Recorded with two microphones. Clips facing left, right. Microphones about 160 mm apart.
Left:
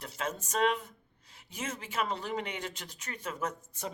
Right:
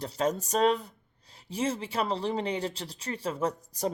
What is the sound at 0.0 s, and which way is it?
Speech, 35° right (ahead or behind).